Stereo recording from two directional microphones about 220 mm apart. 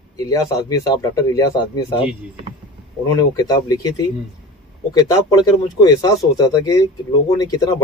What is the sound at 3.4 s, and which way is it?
Speech, 15° left (ahead or behind).